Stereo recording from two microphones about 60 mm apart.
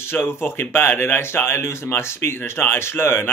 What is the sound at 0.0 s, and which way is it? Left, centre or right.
Speech, left.